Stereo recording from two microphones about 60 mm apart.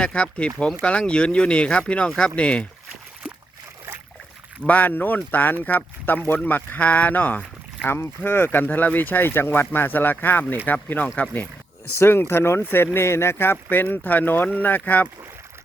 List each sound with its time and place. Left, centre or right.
0.0 s speech: centre
4.6 s speech: left
7.9 s speech: left
11.9 s speech: left